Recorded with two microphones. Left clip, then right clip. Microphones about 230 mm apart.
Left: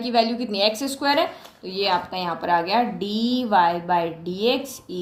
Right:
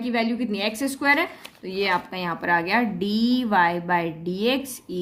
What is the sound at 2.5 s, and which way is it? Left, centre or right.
Speech, right.